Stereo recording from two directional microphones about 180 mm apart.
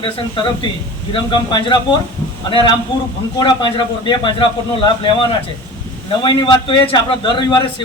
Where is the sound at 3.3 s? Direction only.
25° left (ahead or behind).